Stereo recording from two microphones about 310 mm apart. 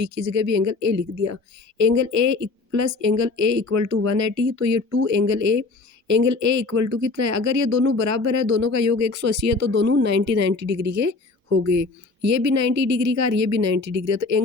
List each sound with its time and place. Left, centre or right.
0.0 s speech: right
10.7 s speech: right
10.9 s speech: right